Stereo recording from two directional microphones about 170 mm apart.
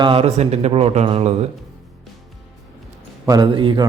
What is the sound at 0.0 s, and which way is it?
Speech, 30° right (ahead or behind).